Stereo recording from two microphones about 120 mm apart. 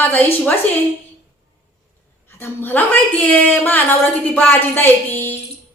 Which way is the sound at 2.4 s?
15° left (ahead or behind).